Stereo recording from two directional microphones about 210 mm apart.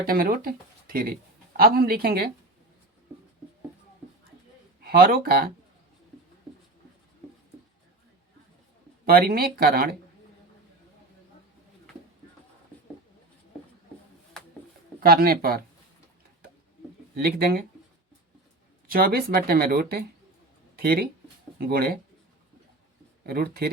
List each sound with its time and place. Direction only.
0.0 s speech: 45° right (ahead or behind)
4.8 s speech: 45° right (ahead or behind)
9.0 s speech: 45° right (ahead or behind)
15.0 s speech: 45° right (ahead or behind)
17.2 s speech: 45° right (ahead or behind)
18.9 s speech: 45° right (ahead or behind)
23.2 s speech: 45° right (ahead or behind)